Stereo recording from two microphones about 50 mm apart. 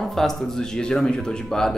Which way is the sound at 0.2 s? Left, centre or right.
Centre.